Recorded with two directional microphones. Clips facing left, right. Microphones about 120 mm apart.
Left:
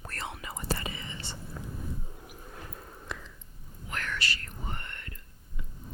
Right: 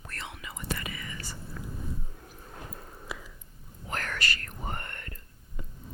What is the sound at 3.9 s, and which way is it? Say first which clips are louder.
Whispering: right 2 dB; 40° right (ahead or behind).